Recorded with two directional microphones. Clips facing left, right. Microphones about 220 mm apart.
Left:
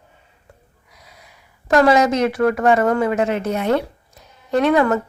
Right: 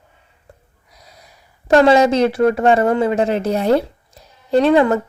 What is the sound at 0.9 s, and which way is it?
Speech, 35° right (ahead or behind).